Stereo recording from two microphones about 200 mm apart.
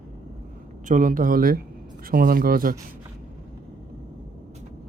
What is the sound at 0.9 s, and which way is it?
Speech, 40° right (ahead or behind).